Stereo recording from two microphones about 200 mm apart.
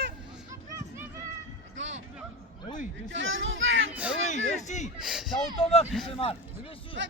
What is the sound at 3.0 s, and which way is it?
Speech, 70° right (ahead or behind).